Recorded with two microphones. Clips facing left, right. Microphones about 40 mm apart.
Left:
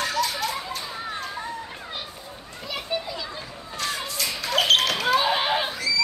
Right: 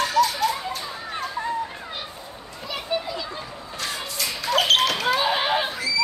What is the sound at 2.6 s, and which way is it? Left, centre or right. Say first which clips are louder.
Children playing: right 2 dB; centre.